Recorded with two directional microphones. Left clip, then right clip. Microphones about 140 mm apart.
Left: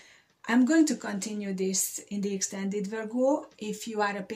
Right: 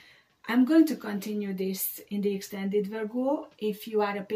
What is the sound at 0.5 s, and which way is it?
Speech, 50° left (ahead or behind).